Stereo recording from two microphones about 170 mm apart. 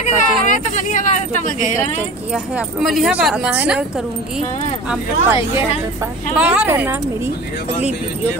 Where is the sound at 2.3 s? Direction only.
5° right (ahead or behind).